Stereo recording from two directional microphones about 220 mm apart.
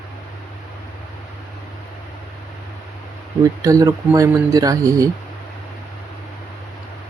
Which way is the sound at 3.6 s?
15° right (ahead or behind).